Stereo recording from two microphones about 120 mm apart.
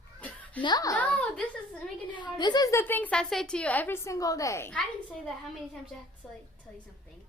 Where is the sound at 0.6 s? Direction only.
35° left (ahead or behind).